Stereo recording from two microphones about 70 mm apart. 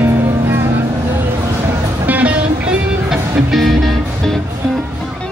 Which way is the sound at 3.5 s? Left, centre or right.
Centre.